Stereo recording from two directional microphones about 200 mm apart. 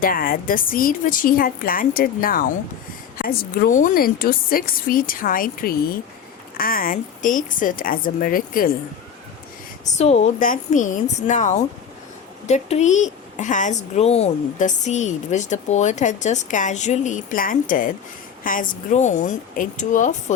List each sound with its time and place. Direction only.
0.0 s a woman's voice: 45° left (ahead or behind)
9.9 s a woman's voice: 35° left (ahead or behind)